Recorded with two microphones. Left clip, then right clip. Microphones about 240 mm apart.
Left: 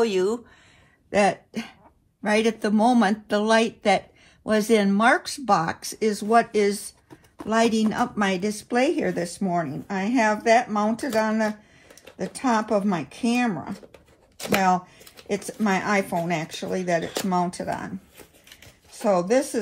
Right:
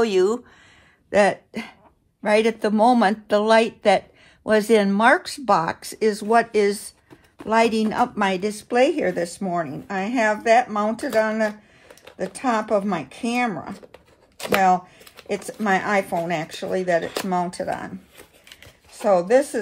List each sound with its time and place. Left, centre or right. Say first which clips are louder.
0.0 s speech: right 3 dB; right
1.1 s speech: right 3 dB; right
13.7 s tearing: right 2 dB; right
15.2 s speech: right 2 dB; right
17.0 s speech: right 2 dB; right
17.3 s speech: right 1 dB; right
18.9 s speech: right 4 dB; right